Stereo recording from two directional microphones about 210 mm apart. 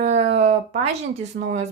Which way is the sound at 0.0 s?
30° right (ahead or behind).